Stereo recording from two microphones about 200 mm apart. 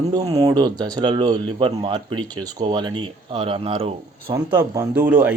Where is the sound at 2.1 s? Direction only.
90° right.